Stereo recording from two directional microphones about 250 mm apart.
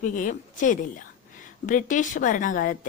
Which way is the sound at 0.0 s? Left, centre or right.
Left.